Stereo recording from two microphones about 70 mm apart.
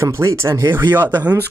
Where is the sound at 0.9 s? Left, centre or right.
Right.